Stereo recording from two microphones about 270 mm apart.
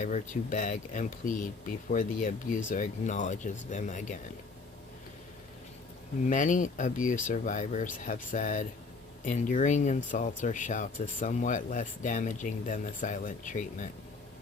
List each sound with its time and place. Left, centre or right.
0.0 s speech: left
6.2 s speech: left